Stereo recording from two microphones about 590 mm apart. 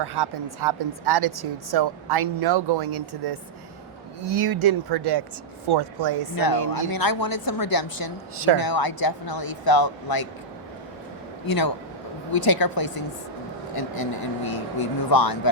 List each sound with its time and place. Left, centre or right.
0.0 s a woman's voice: right
4.3 s a woman's voice: right
6.3 s speech: left
11.4 s speech: left